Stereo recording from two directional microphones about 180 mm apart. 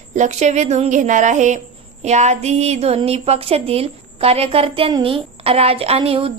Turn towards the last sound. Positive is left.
turn(degrees=-30)  # may be behind; listen again after turning